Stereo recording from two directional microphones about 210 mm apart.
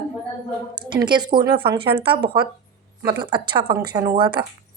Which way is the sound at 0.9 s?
20° right (ahead or behind).